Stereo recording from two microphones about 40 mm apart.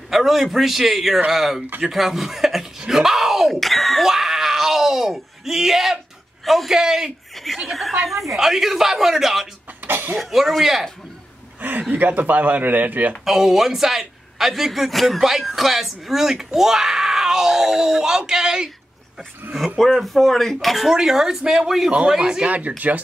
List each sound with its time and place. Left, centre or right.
0.1 s speech: centre
3.5 s speech: centre
4.1 s speech: centre
9.8 s a sound: right
10.1 s speech: centre
11.9 s a man's voice: right
13.2 s speech: centre
19.9 s speech: centre
22.2 s speech: right
22.5 s speech: right